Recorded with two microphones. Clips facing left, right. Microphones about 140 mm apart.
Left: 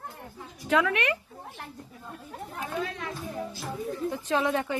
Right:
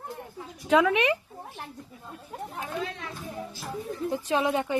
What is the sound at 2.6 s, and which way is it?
Speech, 25° right (ahead or behind).